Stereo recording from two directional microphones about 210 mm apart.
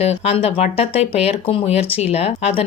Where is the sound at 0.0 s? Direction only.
30° left (ahead or behind).